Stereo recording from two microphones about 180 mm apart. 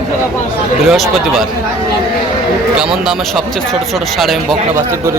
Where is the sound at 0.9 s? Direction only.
Centre (ahead or behind).